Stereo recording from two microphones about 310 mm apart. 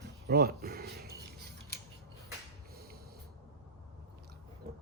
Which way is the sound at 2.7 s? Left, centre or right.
Right.